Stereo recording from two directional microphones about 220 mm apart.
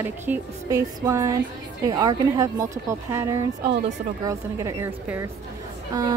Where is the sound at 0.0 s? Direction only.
10° right (ahead or behind).